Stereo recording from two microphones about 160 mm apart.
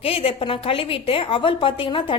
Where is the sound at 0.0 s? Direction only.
35° left (ahead or behind).